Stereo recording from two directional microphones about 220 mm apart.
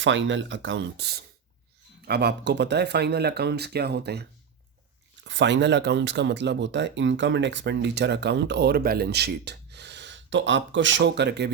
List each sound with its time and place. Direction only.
0.0 s speech: 55° right (ahead or behind)